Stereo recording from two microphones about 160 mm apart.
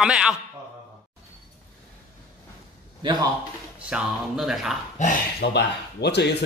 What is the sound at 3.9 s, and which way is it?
Speech, 5° right (ahead or behind).